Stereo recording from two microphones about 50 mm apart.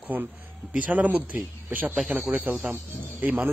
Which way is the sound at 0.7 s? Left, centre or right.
Right.